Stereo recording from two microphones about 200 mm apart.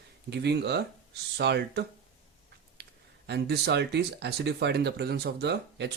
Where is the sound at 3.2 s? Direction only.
55° right (ahead or behind).